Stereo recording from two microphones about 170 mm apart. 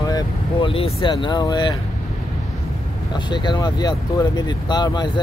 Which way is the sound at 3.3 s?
25° left (ahead or behind).